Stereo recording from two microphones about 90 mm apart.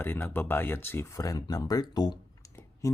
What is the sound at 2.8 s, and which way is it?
Music, 35° left (ahead or behind).